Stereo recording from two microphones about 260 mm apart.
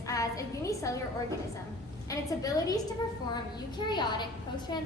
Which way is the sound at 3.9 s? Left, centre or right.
Centre.